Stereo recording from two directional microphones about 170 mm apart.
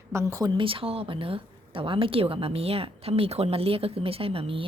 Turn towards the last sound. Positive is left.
turn(degrees=-35)  # may be behind; listen again after turning